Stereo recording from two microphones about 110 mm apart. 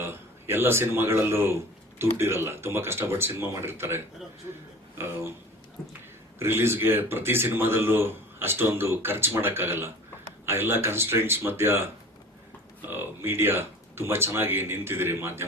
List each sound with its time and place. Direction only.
0.0 s speech: 20° right (ahead or behind)
6.4 s speech: 20° right (ahead or behind)
12.9 s speech: 20° right (ahead or behind)